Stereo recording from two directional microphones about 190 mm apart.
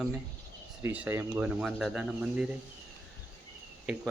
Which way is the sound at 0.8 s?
10° right (ahead or behind).